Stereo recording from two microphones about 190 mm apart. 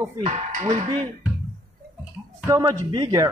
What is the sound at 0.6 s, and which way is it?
Speech, 25° right (ahead or behind).